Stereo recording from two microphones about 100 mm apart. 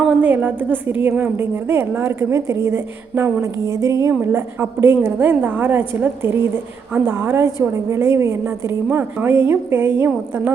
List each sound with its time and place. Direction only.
0.2 s a woman's voice: 15° right (ahead or behind)